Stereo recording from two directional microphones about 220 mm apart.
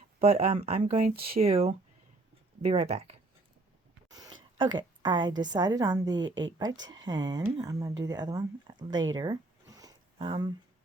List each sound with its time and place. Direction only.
0.2 s a woman's voice: 25° right (ahead or behind)
1.1 s speech: 45° right (ahead or behind)
1.4 s a woman's voice: 25° right (ahead or behind)
4.1 s a sound: 15° right (ahead or behind)
4.5 s a woman's voice: 20° right (ahead or behind)